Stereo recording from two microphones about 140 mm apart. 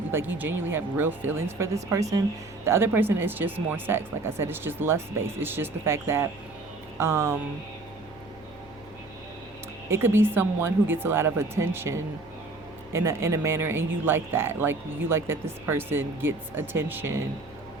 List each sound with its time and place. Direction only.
0.1 s speech: 15° right (ahead or behind)
9.9 s speech: 15° right (ahead or behind)